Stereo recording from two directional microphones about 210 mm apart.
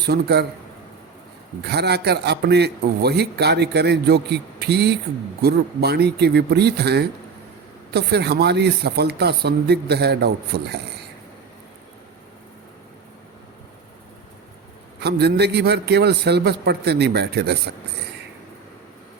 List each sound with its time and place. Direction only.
0.0 s a man's voice: 50° right (ahead or behind)
1.6 s a man's voice: 50° right (ahead or behind)
15.0 s a man's voice: 50° right (ahead or behind)